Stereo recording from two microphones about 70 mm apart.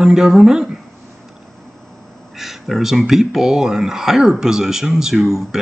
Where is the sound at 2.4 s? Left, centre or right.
Centre.